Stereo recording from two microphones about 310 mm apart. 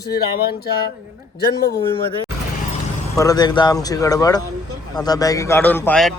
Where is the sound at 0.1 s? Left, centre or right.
Left.